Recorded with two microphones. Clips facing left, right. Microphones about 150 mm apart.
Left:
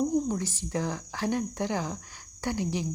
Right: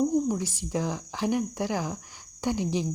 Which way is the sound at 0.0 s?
5° right (ahead or behind).